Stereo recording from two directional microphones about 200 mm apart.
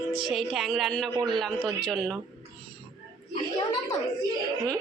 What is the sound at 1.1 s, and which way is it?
Speech, 20° right (ahead or behind).